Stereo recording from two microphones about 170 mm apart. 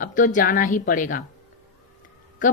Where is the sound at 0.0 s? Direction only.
50° left (ahead or behind).